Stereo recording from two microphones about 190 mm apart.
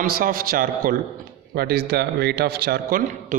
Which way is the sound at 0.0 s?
50° right (ahead or behind).